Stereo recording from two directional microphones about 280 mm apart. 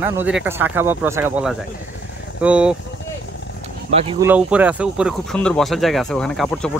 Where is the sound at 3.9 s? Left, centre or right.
Right.